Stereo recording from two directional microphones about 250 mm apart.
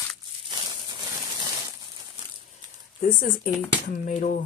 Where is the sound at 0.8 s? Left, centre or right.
Centre.